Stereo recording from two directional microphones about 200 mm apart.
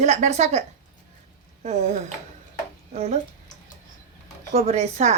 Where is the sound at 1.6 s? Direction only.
35° right (ahead or behind).